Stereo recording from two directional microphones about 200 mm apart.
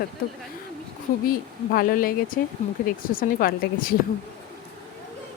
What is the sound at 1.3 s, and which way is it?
Speech, 45° left (ahead or behind).